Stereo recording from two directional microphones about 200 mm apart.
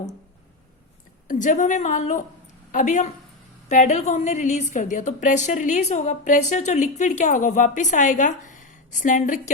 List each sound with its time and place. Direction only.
1.3 s speech: 40° left (ahead or behind)